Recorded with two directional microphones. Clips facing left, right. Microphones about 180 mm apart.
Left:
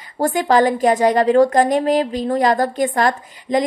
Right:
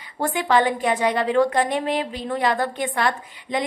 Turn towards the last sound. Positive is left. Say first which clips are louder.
# left 7 dB
turn(degrees=40)  # may be behind; listen again after turning